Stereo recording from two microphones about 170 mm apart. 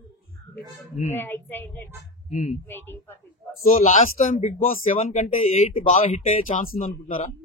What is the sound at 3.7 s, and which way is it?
Speech, 50° left (ahead or behind).